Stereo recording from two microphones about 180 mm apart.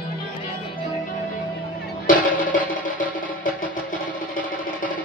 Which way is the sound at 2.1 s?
45° left (ahead or behind).